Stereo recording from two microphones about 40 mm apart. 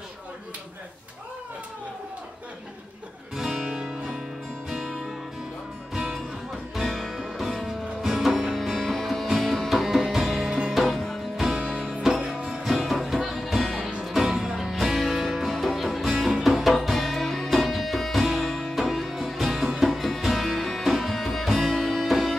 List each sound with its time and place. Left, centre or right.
3.3 s music: centre
4.6 s music: centre
6.7 s music: centre
11.5 s music: right
11.8 s music: centre